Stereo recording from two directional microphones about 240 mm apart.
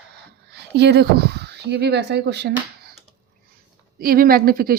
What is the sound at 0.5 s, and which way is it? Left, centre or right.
Speech, right.